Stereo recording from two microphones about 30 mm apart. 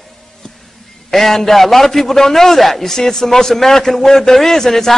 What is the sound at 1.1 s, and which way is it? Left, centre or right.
A man's voice, centre.